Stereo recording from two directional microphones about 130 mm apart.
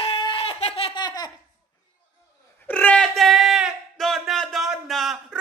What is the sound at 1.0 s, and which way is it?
Laughter, 35° left (ahead or behind).